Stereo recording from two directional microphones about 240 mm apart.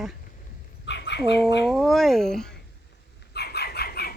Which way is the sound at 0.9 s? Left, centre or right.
Left.